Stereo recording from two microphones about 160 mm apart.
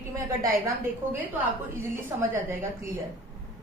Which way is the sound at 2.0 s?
15° right (ahead or behind).